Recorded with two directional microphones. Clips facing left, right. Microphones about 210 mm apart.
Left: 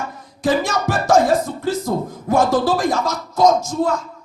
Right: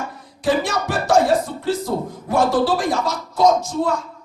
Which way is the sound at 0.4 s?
45° left (ahead or behind).